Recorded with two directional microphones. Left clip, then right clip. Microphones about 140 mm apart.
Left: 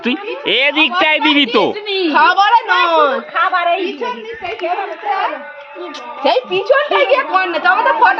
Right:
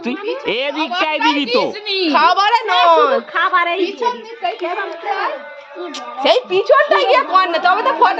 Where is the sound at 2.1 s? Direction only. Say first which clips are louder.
Left 2 dB; 55° right (ahead or behind).